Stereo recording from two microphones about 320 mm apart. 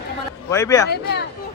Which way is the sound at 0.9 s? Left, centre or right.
Left.